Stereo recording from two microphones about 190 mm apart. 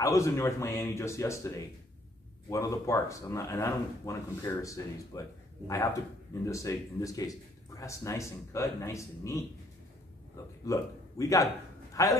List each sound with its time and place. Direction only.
0.0 s speech: 15° left (ahead or behind)
2.5 s speech: 15° left (ahead or behind)
6.4 s a man's voice: 15° left (ahead or behind)